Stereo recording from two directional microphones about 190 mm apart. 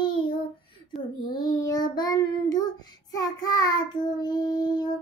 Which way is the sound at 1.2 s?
20° left (ahead or behind).